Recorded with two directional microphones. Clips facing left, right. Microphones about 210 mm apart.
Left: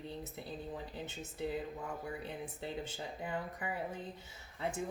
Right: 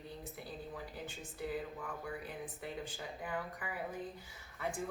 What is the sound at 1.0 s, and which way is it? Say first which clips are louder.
Speech: left 3 dB; 25° left (ahead or behind).